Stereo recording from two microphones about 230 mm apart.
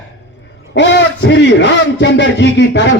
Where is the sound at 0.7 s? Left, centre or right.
Left.